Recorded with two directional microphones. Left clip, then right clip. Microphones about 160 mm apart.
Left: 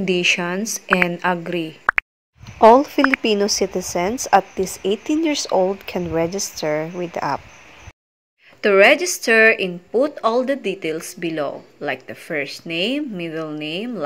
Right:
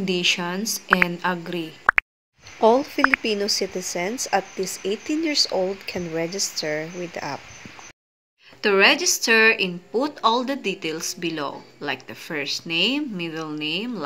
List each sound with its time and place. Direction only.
0.0 s speech: 35° left (ahead or behind)
1.9 s plop: centre (ahead or behind)
2.6 s speech: 40° left (ahead or behind)
8.6 s speech: 20° left (ahead or behind)